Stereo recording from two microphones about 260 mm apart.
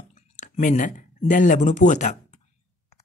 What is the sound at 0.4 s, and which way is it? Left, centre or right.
Speech, left.